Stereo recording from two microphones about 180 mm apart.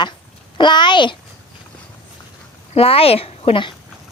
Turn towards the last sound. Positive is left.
turn(degrees=30)  # may be behind; listen again after turning